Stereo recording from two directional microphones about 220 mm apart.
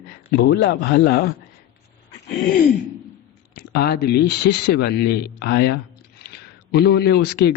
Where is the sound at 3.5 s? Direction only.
45° left (ahead or behind).